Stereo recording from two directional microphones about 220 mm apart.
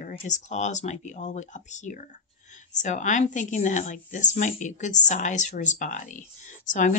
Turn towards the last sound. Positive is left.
turn(degrees=35)  # may be behind; listen again after turning